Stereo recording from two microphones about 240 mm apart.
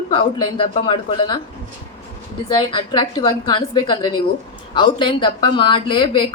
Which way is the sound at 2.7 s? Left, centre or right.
Centre.